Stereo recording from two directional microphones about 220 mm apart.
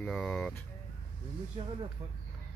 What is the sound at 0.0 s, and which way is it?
Speech, 5° left (ahead or behind).